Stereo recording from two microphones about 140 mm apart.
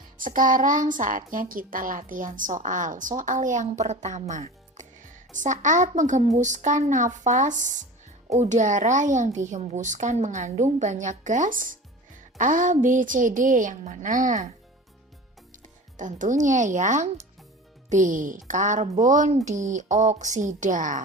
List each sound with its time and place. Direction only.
0.2 s a woman's voice: 70° right (ahead or behind)
15.6 s a woman's voice: 65° right (ahead or behind)